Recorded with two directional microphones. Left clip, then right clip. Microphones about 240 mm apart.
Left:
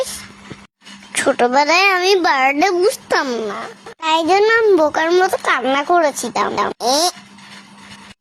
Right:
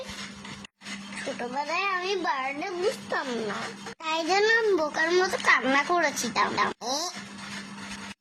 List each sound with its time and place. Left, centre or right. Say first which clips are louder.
1.4 s a child's voice: left 16 dB; left
4.0 s a child's voice: left 11 dB; left